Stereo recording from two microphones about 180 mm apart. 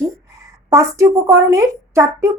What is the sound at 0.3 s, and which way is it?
A woman's voice, 15° right (ahead or behind).